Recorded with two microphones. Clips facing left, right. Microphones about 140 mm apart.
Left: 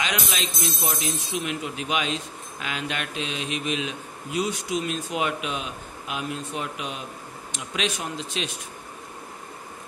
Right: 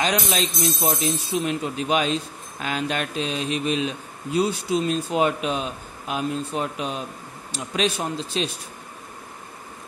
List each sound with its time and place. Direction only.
0.0 s speech: 35° right (ahead or behind)